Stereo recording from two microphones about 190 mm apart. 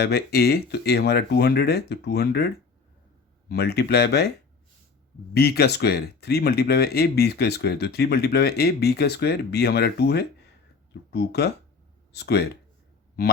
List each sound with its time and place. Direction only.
0.0 s speech: 55° left (ahead or behind)
3.5 s speech: 55° left (ahead or behind)
5.3 s speech: 55° left (ahead or behind)